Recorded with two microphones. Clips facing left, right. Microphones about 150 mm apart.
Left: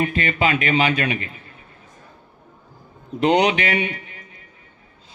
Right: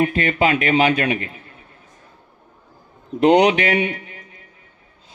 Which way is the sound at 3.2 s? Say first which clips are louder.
Right 4 dB; 50° right (ahead or behind).